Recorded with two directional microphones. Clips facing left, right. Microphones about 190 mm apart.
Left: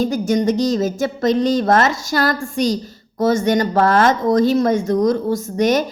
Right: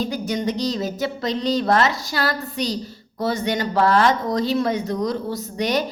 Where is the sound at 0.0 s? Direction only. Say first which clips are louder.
Left 7 dB; 45° left (ahead or behind).